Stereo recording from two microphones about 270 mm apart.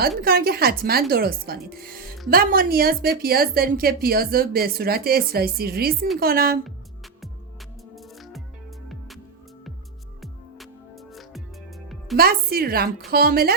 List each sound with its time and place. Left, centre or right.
0.2 s a woman's voice: right
7.9 s music: centre
10.2 s music: centre
12.1 s a woman's voice: right